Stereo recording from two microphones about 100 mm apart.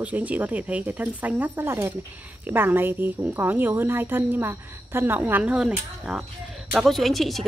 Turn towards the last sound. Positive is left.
turn(degrees=0)  # may be behind; listen again after turning